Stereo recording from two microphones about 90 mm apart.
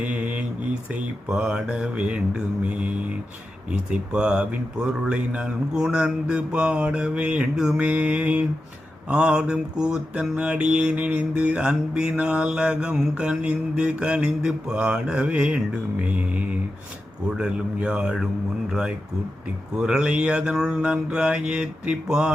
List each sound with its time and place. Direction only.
0.0 s mantra: 15° right (ahead or behind)